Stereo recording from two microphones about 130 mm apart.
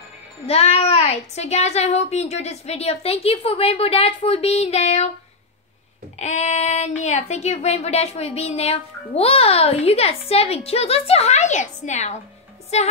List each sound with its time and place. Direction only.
0.5 s speech: 50° left (ahead or behind)
6.1 s speech: 65° left (ahead or behind)